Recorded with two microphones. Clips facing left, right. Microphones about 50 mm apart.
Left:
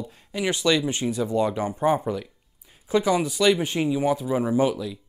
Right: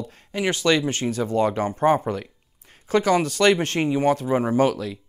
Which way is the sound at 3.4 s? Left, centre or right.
Right.